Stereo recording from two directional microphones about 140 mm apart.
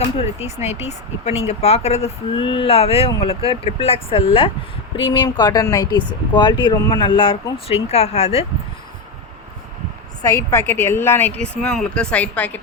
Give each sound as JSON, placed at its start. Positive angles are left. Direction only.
{"t": 0.0, "sound": "speech", "side_deg": 50}
{"t": 7.7, "sound": "speech", "side_deg": 50}
{"t": 10.2, "sound": "a woman's voice", "side_deg": 20}